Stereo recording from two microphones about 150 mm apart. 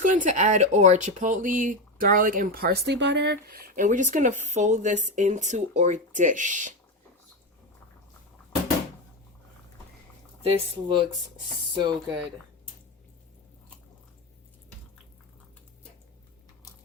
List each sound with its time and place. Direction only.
0.0 s speech: 60° right (ahead or behind); by 3.8 s 85° right
3.8 s speech: 55° right (ahead or behind)
10.4 s speech: 30° right (ahead or behind)